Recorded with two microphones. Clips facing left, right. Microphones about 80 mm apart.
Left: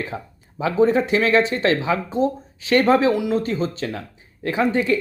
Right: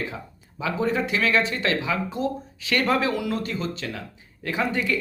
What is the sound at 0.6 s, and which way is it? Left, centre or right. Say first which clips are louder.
Speech: left 7 dB; left.